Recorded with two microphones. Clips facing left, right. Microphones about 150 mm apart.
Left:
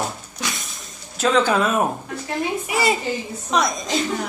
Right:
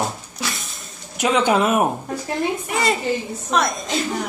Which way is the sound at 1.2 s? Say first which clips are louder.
Right 1 dB; 15° right (ahead or behind).